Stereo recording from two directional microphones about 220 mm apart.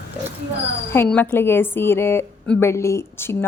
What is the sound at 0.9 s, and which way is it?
A woman's voice, 5° left (ahead or behind).